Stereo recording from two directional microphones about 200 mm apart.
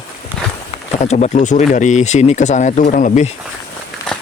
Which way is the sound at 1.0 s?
35° left (ahead or behind).